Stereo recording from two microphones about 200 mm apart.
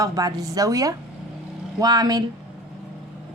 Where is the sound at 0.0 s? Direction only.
15° right (ahead or behind).